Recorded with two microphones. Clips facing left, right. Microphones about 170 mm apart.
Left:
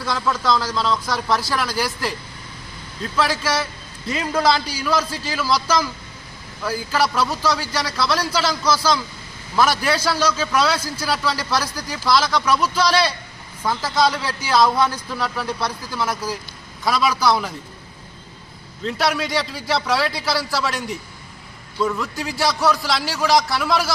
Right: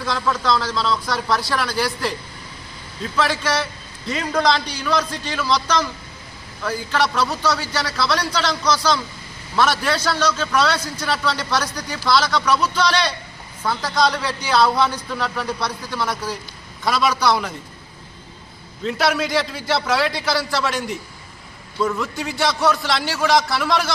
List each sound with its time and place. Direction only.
0.0 s a man's voice: centre (ahead or behind)
3.2 s a man's voice: centre (ahead or behind)
18.8 s a man's voice: centre (ahead or behind)